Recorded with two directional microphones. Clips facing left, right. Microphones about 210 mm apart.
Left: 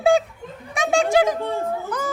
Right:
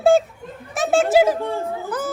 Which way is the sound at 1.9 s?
5° right (ahead or behind).